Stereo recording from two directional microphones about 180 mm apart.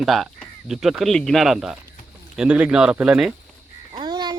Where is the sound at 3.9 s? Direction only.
25° right (ahead or behind).